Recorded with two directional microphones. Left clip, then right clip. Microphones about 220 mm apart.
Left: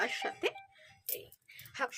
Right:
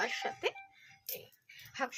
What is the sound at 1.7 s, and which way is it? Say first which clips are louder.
Speech: left 1 dB; 50° left (ahead or behind).